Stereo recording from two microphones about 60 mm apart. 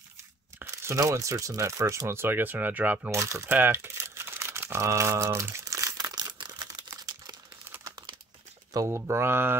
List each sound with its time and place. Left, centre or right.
0.9 s speech: right
3.1 s speech: right
3.4 s a sound: right
8.8 s speech: right